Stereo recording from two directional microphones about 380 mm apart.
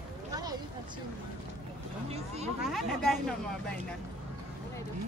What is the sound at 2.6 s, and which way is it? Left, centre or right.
Speech, centre.